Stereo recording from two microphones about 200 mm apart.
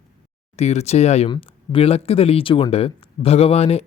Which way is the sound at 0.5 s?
30° left (ahead or behind).